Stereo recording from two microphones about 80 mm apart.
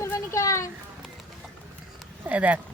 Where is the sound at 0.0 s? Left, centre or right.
Left.